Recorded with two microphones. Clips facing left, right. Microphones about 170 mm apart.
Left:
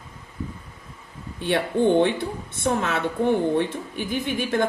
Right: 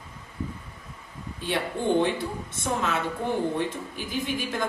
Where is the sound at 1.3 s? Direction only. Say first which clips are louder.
Left 7 dB; 60° left (ahead or behind).